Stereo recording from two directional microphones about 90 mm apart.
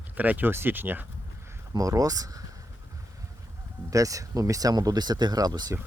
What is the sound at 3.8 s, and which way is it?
Speech, 40° right (ahead or behind).